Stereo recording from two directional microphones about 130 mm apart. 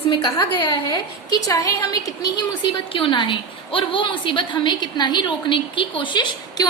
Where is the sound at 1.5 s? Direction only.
25° left (ahead or behind).